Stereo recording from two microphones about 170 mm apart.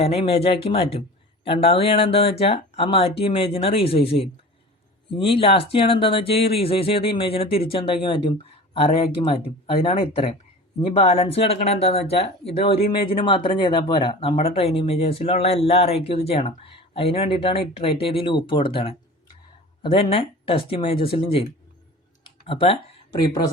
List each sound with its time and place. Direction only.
0.0 s speech: 35° left (ahead or behind)
22.2 s computer keyboard: 30° left (ahead or behind)